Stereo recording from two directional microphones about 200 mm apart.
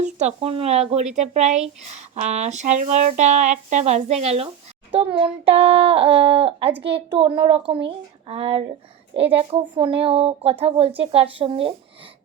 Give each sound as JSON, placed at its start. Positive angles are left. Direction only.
{"t": 0.0, "sound": "speech", "side_deg": -35}